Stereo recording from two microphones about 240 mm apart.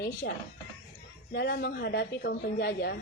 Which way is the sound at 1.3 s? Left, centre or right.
Left.